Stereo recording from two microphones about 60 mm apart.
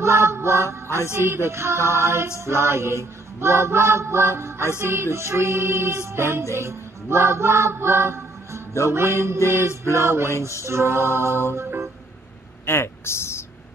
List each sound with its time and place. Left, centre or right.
0.0 s mantra: right
1.1 s music: right
12.6 s a sound: left